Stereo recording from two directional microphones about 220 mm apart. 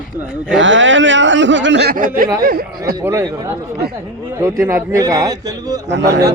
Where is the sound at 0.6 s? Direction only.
55° right (ahead or behind); by 2.3 s 35° right (ahead or behind).